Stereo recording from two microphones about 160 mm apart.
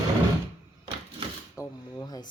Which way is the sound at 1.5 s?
20° left (ahead or behind).